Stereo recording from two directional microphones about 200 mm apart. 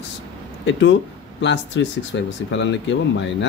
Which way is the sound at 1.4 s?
60° left (ahead or behind).